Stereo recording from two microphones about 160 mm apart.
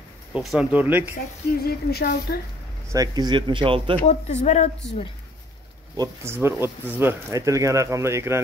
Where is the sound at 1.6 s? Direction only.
75° left (ahead or behind).